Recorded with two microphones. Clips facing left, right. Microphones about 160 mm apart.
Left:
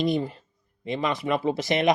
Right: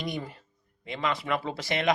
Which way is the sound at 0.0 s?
25° left (ahead or behind).